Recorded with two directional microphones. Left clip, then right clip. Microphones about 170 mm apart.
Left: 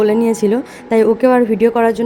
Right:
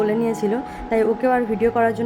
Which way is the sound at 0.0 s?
30° left (ahead or behind).